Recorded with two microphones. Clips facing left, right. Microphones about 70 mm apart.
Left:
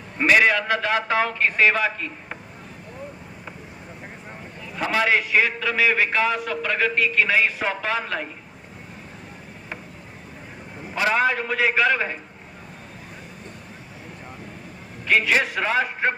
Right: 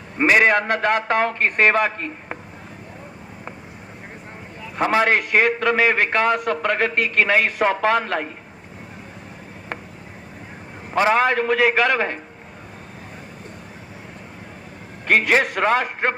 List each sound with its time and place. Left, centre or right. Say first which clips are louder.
0.2 s a man's voice: right 2 dB; right
0.5 s a man's voice: right 3 dB; right
4.8 s a man's voice: right 3 dB; right
11.1 s a man's voice: right 3 dB; right
15.0 s a man's voice: right 3 dB; right